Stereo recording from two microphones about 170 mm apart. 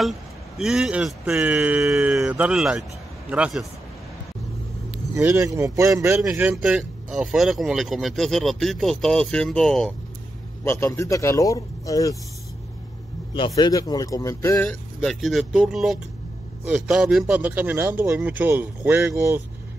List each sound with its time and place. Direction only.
0.6 s speech: 5° right (ahead or behind)
5.1 s speech: 15° right (ahead or behind); by 9.9 s 5° left (ahead or behind)
10.6 s speech: 15° left (ahead or behind)
13.6 s speech: 20° left (ahead or behind); by 19.4 s 15° right (ahead or behind)